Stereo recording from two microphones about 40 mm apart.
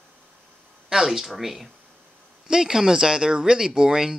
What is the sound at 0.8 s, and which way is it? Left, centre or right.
Speech, centre.